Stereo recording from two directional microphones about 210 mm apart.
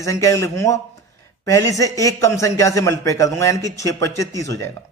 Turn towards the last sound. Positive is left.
turn(degrees=15)  # may be behind; listen again after turning